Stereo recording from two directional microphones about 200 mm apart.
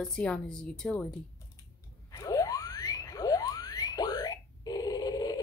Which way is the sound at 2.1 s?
20° left (ahead or behind).